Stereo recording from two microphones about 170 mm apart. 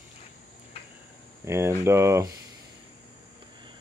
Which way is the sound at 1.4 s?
15° right (ahead or behind).